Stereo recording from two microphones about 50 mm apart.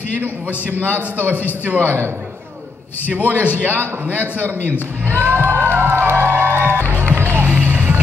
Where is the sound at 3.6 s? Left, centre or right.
Right.